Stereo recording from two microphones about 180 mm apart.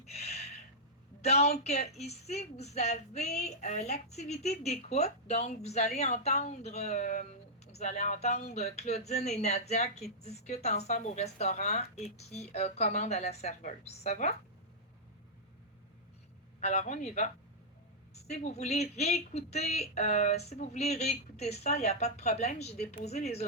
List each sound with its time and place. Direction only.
0.1 s gasp: 35° left (ahead or behind)
1.2 s speech: 35° left (ahead or behind)
16.6 s speech: 40° left (ahead or behind)